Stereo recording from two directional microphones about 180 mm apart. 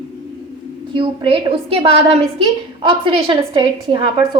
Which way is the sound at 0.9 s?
30° right (ahead or behind).